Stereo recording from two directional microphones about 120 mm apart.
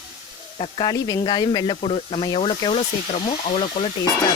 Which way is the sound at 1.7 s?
55° left (ahead or behind).